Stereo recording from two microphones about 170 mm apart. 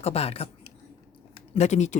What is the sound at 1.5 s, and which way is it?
Speech, 40° left (ahead or behind).